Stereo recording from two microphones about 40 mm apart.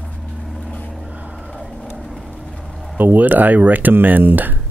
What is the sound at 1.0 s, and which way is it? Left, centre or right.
Vehicle, right.